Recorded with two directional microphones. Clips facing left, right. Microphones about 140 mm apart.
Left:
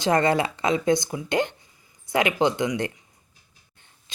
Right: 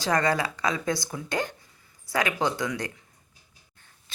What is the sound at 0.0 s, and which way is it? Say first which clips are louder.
Speech: left 4 dB; 25° left (ahead or behind).